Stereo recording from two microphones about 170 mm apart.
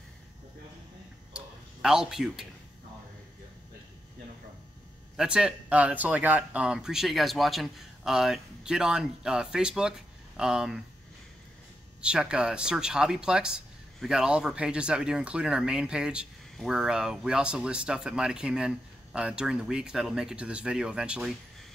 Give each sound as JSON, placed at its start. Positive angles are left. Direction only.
{"t": 1.3, "sound": "a sound", "side_deg": -5}
{"t": 5.1, "sound": "speech", "side_deg": -5}
{"t": 12.0, "sound": "speech", "side_deg": -5}